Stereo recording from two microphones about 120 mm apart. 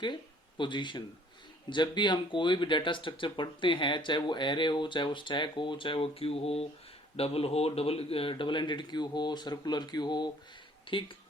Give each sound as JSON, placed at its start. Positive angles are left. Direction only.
{"t": 0.0, "sound": "speech", "side_deg": 40}